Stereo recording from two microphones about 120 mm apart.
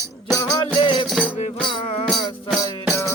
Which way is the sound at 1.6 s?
55° left (ahead or behind).